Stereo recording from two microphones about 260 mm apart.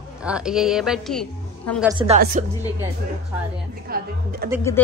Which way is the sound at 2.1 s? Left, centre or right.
Right.